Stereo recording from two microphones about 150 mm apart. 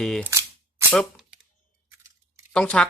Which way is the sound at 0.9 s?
5° left (ahead or behind).